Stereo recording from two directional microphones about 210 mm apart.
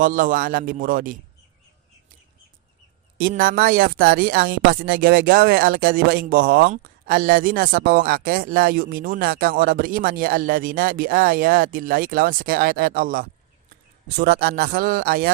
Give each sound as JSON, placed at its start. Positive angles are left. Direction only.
{"t": 0.0, "sound": "a man's voice", "side_deg": -40}
{"t": 3.2, "sound": "speech", "side_deg": -45}